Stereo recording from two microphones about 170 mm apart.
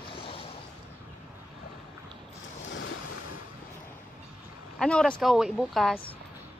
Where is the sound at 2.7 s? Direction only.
90° left.